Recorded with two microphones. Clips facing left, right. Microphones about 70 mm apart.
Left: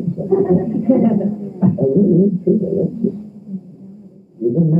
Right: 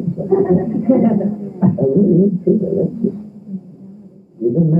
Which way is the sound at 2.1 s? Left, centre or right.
Right.